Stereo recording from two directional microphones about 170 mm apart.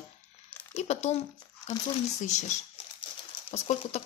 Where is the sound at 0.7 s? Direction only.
40° left (ahead or behind).